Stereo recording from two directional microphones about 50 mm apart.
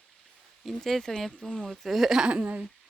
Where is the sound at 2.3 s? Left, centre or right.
Right.